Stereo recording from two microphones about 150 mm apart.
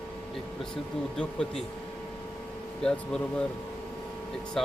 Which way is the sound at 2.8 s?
5° left (ahead or behind).